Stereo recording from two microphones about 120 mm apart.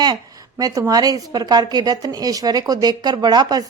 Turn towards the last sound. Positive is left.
turn(degrees=-35)  # may be behind; listen again after turning